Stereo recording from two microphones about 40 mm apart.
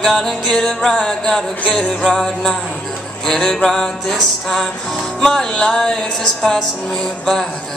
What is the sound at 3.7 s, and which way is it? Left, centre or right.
Music, centre.